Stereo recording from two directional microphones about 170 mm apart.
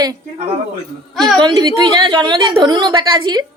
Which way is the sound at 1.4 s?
25° right (ahead or behind).